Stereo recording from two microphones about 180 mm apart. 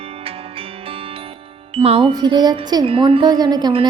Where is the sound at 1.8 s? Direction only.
30° right (ahead or behind).